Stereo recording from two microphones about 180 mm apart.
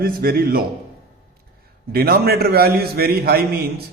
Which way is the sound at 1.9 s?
55° right (ahead or behind).